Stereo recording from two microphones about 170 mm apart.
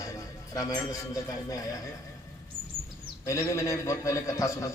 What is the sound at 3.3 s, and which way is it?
A man's voice, 15° left (ahead or behind).